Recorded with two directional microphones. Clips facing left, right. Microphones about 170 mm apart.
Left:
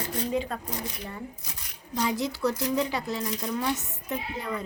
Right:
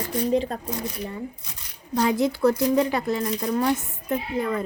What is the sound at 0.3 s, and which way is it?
Speech, 35° right (ahead or behind).